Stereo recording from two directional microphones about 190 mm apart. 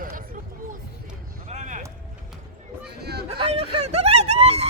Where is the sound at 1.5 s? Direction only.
40° right (ahead or behind).